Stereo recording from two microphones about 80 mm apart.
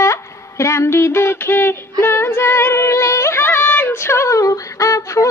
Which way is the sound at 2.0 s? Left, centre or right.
Left.